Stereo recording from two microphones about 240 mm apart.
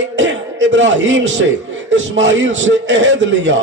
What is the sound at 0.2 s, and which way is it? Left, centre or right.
A man's voice, right.